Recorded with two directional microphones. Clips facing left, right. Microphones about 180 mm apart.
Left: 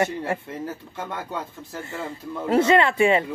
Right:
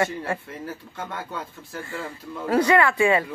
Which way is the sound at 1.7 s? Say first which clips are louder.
Left 1 dB; 25° left (ahead or behind).